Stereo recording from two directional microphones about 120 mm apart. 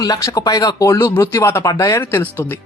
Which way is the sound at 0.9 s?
20° left (ahead or behind).